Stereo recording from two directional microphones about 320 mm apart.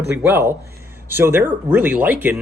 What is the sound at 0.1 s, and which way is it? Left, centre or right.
Speech, centre.